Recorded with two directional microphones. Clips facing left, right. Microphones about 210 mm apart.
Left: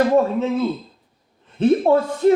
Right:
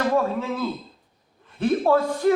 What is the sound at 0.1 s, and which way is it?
A woman's voice, 20° left (ahead or behind).